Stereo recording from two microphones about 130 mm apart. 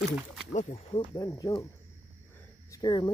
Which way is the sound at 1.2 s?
25° left (ahead or behind).